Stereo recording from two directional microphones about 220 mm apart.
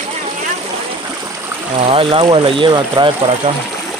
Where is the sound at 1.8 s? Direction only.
25° right (ahead or behind).